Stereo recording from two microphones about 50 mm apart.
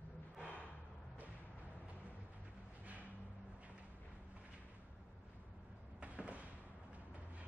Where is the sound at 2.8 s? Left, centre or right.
Right.